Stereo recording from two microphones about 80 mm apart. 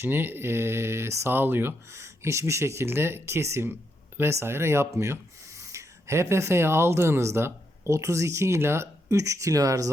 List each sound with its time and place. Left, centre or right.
0.0 s speech: right